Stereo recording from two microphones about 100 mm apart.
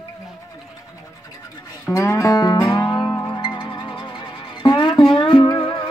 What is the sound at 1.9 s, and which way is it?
Music, 30° left (ahead or behind).